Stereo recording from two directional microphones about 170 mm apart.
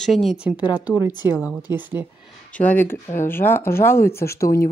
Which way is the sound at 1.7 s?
10° right (ahead or behind).